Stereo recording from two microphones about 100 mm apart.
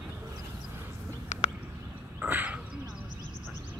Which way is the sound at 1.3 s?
90° left.